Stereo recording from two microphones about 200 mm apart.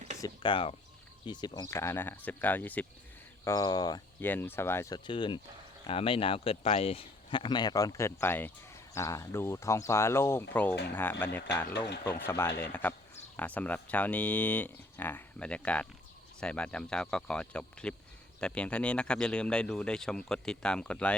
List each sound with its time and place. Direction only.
0.2 s speech: 25° left (ahead or behind)
5.0 s speech: 25° left (ahead or behind); by 21.2 s 5° left (ahead or behind)